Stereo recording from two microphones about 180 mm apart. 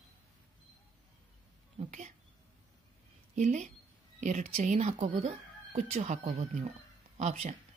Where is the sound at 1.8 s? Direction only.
45° right (ahead or behind).